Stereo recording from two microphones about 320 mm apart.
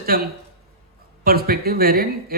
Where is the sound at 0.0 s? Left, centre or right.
Right.